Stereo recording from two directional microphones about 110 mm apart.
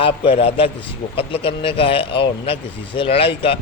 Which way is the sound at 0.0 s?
60° left (ahead or behind).